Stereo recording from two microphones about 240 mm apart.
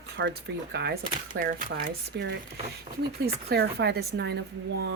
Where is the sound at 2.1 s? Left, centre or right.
Right.